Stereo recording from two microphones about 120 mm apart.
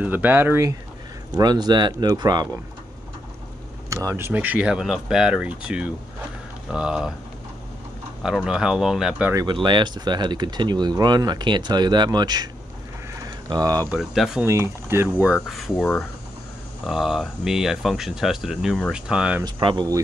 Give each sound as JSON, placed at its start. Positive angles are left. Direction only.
{"t": 0.0, "sound": "speech", "side_deg": -15}
{"t": 1.4, "sound": "speech", "side_deg": -35}
{"t": 3.9, "sound": "speech", "side_deg": -25}
{"t": 4.3, "sound": "speech", "side_deg": -15}
{"t": 8.5, "sound": "speech", "side_deg": -5}
{"t": 9.5, "sound": "speech", "side_deg": -40}
{"t": 13.1, "sound": "a sound", "side_deg": -30}
{"t": 13.9, "sound": "speech", "side_deg": 0}
{"t": 14.4, "sound": "speech", "side_deg": -25}
{"t": 15.4, "sound": "speech", "side_deg": 0}
{"t": 16.8, "sound": "speech", "side_deg": -5}
{"t": 19.4, "sound": "speech", "side_deg": -40}